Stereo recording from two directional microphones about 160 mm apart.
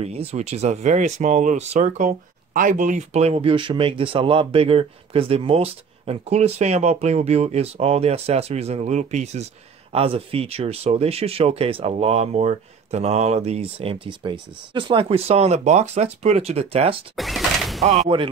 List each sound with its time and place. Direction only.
0.0 s speech: 40° right (ahead or behind)
17.1 s sliding door: centre (ahead or behind)
17.8 s speech: 35° right (ahead or behind)